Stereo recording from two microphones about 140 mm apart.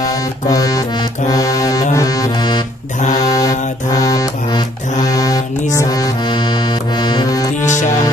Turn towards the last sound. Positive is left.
turn(degrees=60)  # may be behind; listen again after turning